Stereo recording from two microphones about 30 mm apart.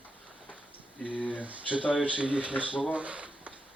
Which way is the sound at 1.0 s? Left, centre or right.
Left.